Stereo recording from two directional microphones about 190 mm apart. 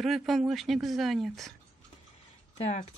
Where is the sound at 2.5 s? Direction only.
35° left (ahead or behind).